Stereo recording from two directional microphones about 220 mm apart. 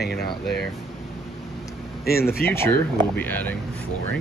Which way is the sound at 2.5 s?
10° left (ahead or behind).